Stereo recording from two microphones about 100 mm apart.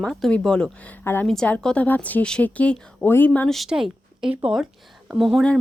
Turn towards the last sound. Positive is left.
turn(degrees=0)  # may be behind; listen again after turning